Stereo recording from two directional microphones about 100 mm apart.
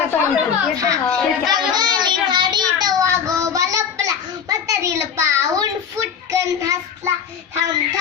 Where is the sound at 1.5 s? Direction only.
45° right (ahead or behind).